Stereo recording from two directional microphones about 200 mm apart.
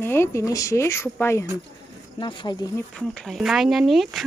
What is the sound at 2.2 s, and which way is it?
Speech, 25° left (ahead or behind).